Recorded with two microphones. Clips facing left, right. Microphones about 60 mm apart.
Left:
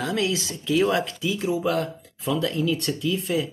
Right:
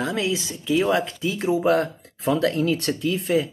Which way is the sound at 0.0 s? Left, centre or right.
Centre.